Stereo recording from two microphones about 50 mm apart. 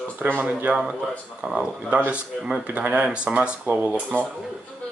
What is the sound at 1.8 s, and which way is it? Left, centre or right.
Speech, right.